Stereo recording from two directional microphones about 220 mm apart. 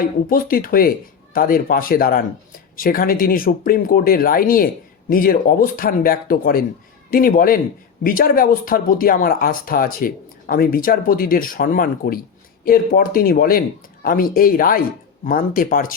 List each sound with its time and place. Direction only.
0.3 s speech: 40° left (ahead or behind)